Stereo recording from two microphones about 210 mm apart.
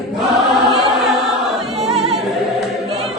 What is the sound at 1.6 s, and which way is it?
Choir, centre (ahead or behind).